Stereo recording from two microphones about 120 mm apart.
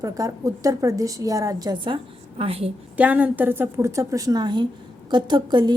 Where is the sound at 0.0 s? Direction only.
30° right (ahead or behind).